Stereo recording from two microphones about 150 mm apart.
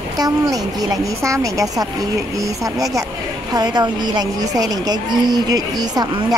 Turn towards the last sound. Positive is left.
turn(degrees=-25)  # may be behind; listen again after turning